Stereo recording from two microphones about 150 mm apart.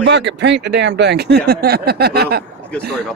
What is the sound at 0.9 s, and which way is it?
Speech, 90° right.